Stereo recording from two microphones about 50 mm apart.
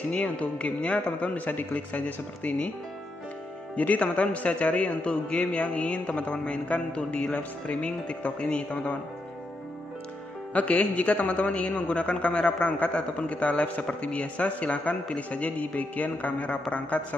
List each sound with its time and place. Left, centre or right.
0.1 s a man's voice: left
3.7 s a man's voice: left
10.5 s a man's voice: left